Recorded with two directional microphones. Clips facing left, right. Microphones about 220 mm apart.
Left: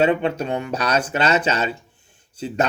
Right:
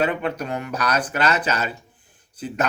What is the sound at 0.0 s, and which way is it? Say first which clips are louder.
Speech: left 4 dB; 25° left (ahead or behind).